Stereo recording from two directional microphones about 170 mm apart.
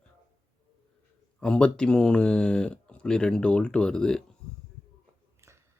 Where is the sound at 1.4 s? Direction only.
5° left (ahead or behind).